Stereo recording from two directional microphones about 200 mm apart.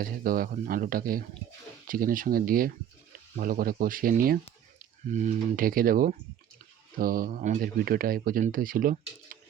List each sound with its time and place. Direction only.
0.0 s speech: 45° right (ahead or behind)